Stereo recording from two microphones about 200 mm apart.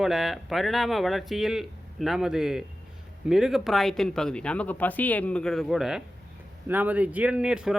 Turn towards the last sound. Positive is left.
turn(degrees=-5)  # may be behind; listen again after turning